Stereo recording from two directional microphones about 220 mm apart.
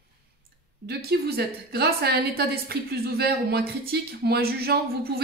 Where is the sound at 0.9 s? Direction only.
45° right (ahead or behind).